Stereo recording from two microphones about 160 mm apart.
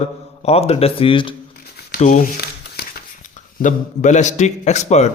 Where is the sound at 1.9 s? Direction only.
55° left (ahead or behind).